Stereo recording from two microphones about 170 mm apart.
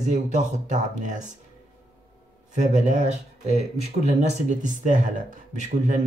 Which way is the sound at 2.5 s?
45° right (ahead or behind).